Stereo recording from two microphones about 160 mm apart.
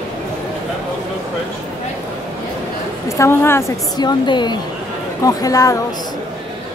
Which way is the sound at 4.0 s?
25° left (ahead or behind).